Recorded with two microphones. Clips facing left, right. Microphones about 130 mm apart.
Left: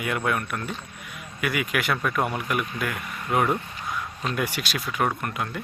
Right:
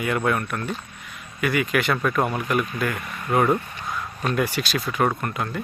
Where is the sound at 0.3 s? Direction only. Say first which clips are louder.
Right 3 dB; centre (ahead or behind).